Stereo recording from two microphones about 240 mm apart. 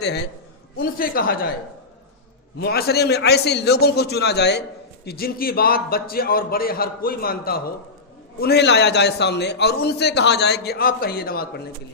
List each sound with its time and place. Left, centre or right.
0.0 s a man's voice: left
2.6 s a man's voice: left